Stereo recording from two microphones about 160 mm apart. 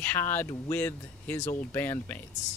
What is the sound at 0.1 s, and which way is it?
Speech, 10° left (ahead or behind).